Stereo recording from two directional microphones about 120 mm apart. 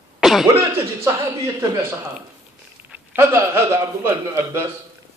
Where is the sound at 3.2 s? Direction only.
20° right (ahead or behind).